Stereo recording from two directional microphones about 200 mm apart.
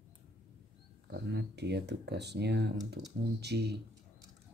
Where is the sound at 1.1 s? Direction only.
55° right (ahead or behind).